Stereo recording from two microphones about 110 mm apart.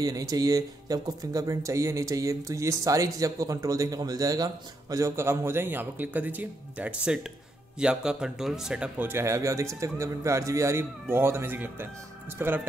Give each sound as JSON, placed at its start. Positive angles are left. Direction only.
{"t": 0.0, "sound": "speech", "side_deg": -35}
{"t": 9.0, "sound": "speech", "side_deg": -25}